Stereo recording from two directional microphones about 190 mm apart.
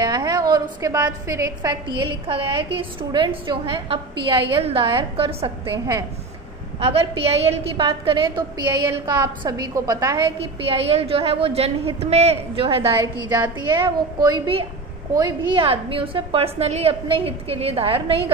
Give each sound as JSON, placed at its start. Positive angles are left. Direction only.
{"t": 0.0, "sound": "a woman's voice", "side_deg": -20}
{"t": 7.4, "sound": "a woman's voice", "side_deg": -30}
{"t": 10.7, "sound": "a woman's voice", "side_deg": -30}